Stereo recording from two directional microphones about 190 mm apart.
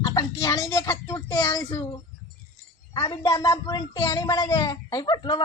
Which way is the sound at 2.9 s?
20° left (ahead or behind).